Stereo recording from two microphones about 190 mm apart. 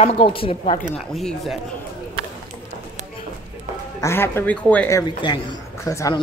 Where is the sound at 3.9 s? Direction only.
15° left (ahead or behind).